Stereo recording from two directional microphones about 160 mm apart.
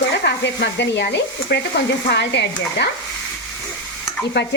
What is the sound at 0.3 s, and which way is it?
Speech, 90° left.